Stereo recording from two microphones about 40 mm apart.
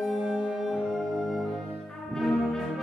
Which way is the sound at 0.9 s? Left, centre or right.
Centre.